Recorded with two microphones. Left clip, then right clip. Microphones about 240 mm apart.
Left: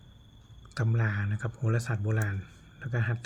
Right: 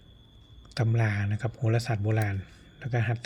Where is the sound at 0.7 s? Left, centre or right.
Centre.